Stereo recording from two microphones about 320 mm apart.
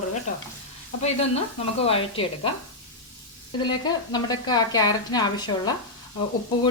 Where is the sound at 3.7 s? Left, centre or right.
Centre.